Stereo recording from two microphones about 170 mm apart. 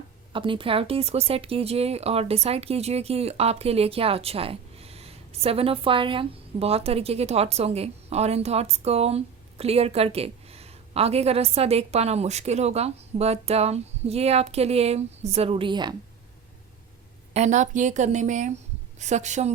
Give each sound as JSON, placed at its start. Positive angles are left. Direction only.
{"t": 0.3, "sound": "speech", "side_deg": -30}
{"t": 17.3, "sound": "a woman's voice", "side_deg": -45}